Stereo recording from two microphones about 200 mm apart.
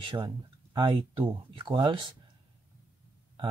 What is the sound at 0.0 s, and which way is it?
Speech, 25° right (ahead or behind).